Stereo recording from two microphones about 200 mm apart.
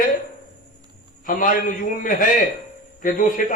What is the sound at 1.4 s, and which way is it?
A man's voice, 45° left (ahead or behind).